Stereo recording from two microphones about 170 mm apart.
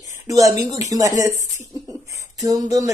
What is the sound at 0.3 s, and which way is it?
Speech, 20° right (ahead or behind).